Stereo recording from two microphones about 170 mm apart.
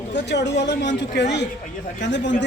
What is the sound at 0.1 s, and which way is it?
Speech, 90° left.